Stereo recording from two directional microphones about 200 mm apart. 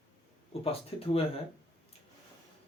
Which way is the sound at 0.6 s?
30° left (ahead or behind).